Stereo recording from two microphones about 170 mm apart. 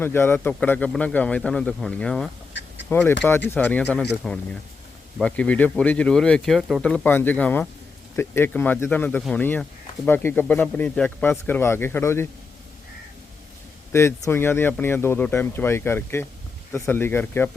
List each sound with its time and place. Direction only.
0.0 s a man's voice: 15° left (ahead or behind)
2.5 s duck: 90° left
2.9 s a man's voice: 10° left (ahead or behind)
6.9 s a man's voice: 10° left (ahead or behind)
13.9 s a man's voice: 15° left (ahead or behind)